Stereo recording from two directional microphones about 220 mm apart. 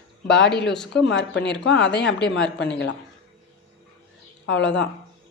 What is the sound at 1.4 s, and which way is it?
Speech, 55° left (ahead or behind).